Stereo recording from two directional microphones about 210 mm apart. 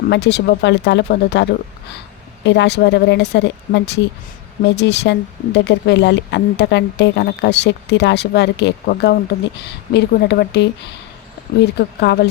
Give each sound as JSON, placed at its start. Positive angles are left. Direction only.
{"t": 0.1, "sound": "speech", "side_deg": 55}